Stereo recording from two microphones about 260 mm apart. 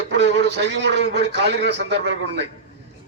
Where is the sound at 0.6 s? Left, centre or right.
Right.